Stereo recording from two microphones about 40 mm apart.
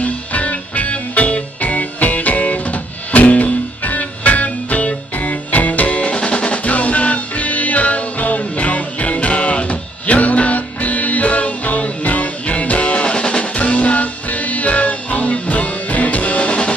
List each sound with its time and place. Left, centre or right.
0.0 s music: left
13.5 s music: left